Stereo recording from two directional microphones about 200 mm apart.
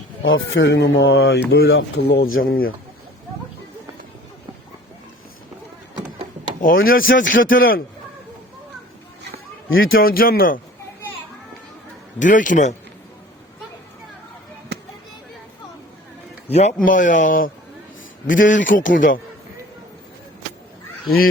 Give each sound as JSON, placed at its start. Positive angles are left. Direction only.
{"t": 0.2, "sound": "speech", "side_deg": 70}
{"t": 1.5, "sound": "speech", "side_deg": 55}
{"t": 6.8, "sound": "speech", "side_deg": 45}
{"t": 7.3, "sound": "speech", "side_deg": 75}
{"t": 9.6, "sound": "a man's voice", "side_deg": 75}
{"t": 9.9, "sound": "speech", "side_deg": 50}
{"t": 12.2, "sound": "a man's voice", "side_deg": 40}
{"t": 14.7, "sound": "chop", "side_deg": -55}
{"t": 16.5, "sound": "a man's voice", "side_deg": 30}